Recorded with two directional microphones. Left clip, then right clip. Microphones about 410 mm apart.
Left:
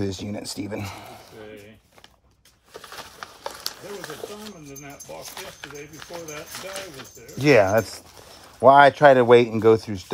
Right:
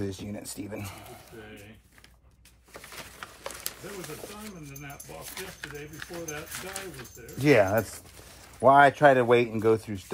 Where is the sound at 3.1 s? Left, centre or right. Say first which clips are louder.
Left 5 dB; centre.